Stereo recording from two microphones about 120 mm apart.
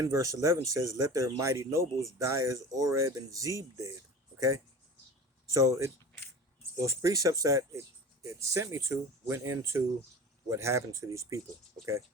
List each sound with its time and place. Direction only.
0.0 s speech: 25° right (ahead or behind)